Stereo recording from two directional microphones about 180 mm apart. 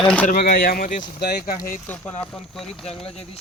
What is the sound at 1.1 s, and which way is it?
Speech, 65° left (ahead or behind).